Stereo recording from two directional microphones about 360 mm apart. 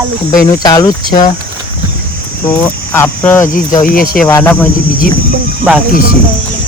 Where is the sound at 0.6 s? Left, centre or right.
Centre.